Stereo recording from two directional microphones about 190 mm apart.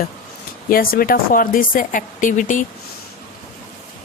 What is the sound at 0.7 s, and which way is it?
Speech, 50° left (ahead or behind).